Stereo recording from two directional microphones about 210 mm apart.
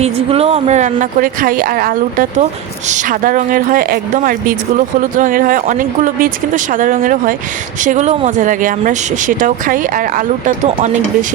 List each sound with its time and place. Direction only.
0.0 s speech: 30° right (ahead or behind)